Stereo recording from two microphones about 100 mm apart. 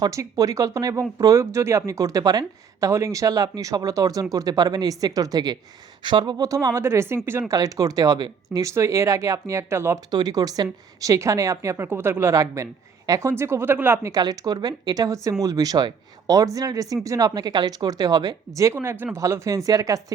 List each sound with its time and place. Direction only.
0.1 s speech: 35° right (ahead or behind)
7.5 s speech: 35° right (ahead or behind)
10.1 s speech: 45° right (ahead or behind); by 14.1 s 20° right (ahead or behind)
14.1 s speech: 40° right (ahead or behind)